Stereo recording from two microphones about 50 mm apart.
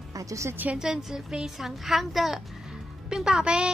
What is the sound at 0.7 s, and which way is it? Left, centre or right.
A woman's voice, centre.